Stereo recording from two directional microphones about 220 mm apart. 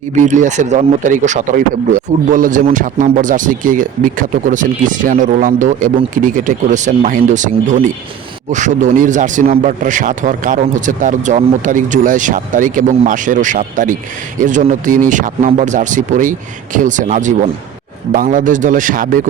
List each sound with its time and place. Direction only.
0.3 s a man's voice: 35° right (ahead or behind)